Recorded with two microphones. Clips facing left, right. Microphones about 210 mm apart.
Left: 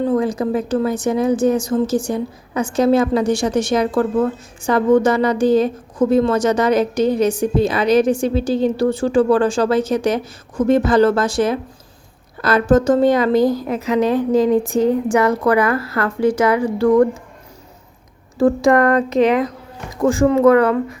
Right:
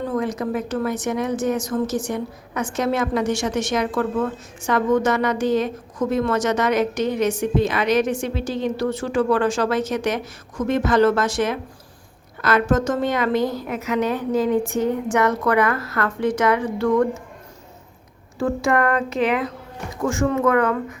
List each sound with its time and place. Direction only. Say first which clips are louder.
0.1 s a woman's voice: left 6 dB; 30° left (ahead or behind)
18.3 s a woman's voice: left 7 dB; 35° left (ahead or behind)